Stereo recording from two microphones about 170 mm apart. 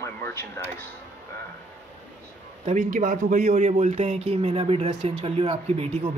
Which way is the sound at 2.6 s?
45° right (ahead or behind).